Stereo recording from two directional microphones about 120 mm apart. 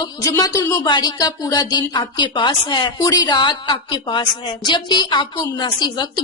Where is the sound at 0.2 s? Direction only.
30° left (ahead or behind).